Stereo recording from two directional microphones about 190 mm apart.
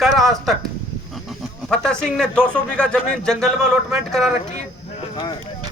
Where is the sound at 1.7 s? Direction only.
5° left (ahead or behind).